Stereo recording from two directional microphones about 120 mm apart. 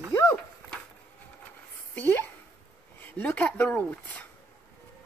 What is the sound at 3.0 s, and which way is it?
Speech, 15° left (ahead or behind).